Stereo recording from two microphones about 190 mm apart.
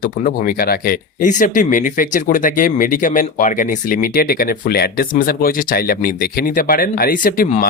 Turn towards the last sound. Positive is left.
turn(degrees=45)  # may be behind; listen again after turning